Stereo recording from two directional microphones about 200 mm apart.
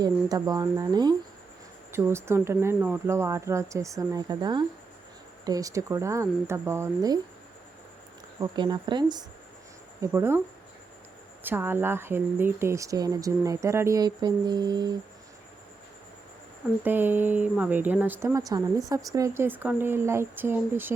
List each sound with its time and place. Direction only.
0.0 s speech: 20° right (ahead or behind)
8.4 s speech: 20° right (ahead or behind)
11.4 s speech: 10° right (ahead or behind)
16.8 s speech: 10° right (ahead or behind)